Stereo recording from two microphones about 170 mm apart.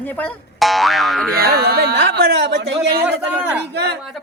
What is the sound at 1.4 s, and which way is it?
Speech, 65° right (ahead or behind).